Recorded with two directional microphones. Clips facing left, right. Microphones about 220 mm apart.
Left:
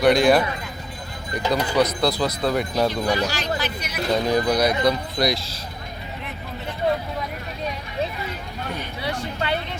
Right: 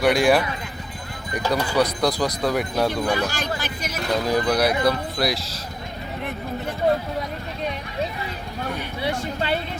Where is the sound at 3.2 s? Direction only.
50° right (ahead or behind).